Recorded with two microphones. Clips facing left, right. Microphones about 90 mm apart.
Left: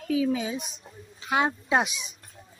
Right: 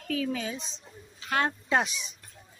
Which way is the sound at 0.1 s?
10° left (ahead or behind).